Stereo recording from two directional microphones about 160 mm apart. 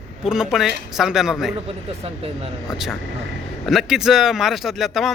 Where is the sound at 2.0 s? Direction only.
40° right (ahead or behind).